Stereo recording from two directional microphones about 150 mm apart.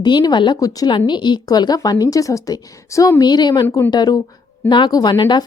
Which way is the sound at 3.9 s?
25° left (ahead or behind).